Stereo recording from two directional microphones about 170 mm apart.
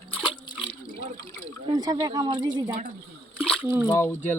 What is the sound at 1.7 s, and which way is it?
Speech, 20° right (ahead or behind).